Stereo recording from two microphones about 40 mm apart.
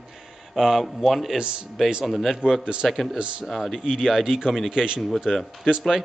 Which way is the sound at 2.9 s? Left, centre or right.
Centre.